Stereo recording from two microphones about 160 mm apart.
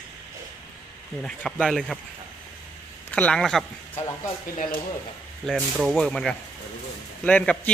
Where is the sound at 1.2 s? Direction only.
5° left (ahead or behind).